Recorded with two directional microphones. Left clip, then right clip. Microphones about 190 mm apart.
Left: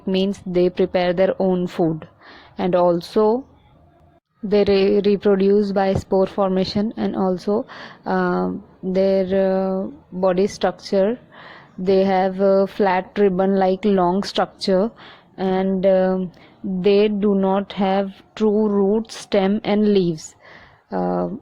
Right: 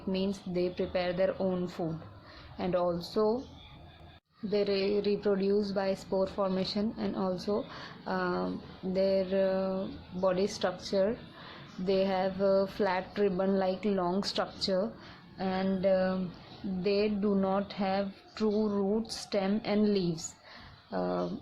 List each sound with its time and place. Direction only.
0.5 s a woman's voice: 45° left (ahead or behind)
4.5 s a woman's voice: 45° left (ahead or behind)